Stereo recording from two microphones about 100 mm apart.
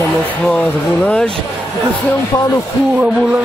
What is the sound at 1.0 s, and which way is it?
Speech, 5° left (ahead or behind).